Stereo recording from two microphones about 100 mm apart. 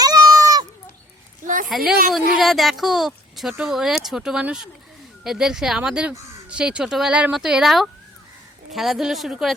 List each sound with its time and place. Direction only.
0.0 s cat: 40° right (ahead or behind)
1.6 s a woman's voice: centre (ahead or behind)